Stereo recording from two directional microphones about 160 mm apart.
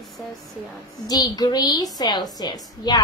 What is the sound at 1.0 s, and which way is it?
A woman's voice, 25° left (ahead or behind).